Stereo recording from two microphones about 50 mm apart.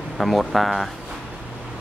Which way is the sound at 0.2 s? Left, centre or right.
Centre.